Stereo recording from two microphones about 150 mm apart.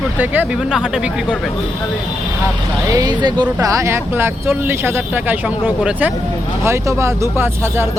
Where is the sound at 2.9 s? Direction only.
25° right (ahead or behind); by 6.1 s 10° right (ahead or behind).